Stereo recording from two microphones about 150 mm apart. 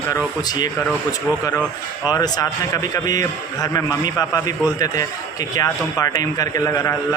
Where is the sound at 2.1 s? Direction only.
25° left (ahead or behind).